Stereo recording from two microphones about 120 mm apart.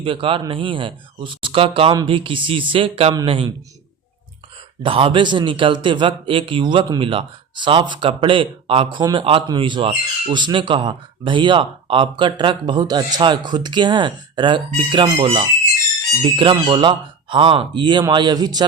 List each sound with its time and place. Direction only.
0.0 s a man's voice: 50° right (ahead or behind)
4.8 s a man's voice: 50° right (ahead or behind)
7.0 s a man's voice: 45° right (ahead or behind)